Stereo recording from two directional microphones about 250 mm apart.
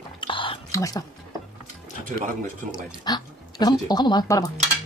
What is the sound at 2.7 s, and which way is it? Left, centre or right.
Speech, centre.